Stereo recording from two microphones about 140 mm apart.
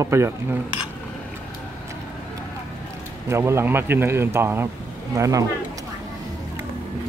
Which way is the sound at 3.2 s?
20° right (ahead or behind).